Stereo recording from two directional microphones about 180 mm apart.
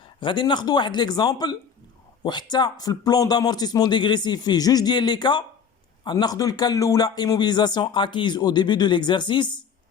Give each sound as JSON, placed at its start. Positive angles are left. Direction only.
{"t": 0.0, "sound": "speech", "side_deg": 30}